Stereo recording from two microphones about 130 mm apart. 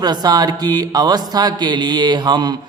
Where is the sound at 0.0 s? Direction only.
30° right (ahead or behind).